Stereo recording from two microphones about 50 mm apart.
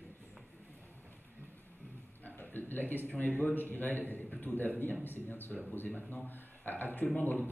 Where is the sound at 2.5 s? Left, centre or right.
Left.